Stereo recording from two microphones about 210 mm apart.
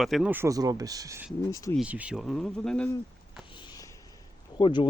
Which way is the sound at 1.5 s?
15° left (ahead or behind).